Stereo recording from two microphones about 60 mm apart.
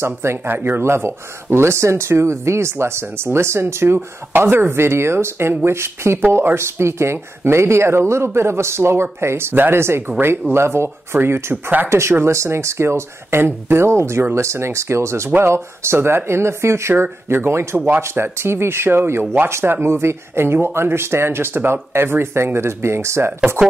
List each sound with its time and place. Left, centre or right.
0.0 s speech: right
16.9 s speech: right
17.7 s speech: right
18.0 s speech: right